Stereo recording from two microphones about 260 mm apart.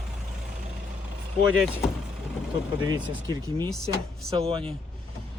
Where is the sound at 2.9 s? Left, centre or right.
Centre.